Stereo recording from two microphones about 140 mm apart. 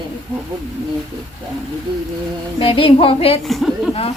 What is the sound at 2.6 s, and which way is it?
Speech, 40° left (ahead or behind).